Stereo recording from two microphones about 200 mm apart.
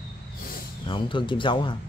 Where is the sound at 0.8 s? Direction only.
25° left (ahead or behind).